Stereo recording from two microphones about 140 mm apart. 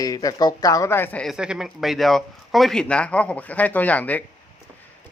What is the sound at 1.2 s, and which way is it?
Speech, 5° right (ahead or behind).